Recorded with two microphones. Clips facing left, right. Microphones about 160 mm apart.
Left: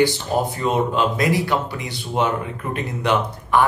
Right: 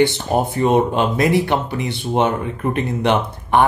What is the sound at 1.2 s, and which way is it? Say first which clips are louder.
Speech: right 3 dB; 25° right (ahead or behind).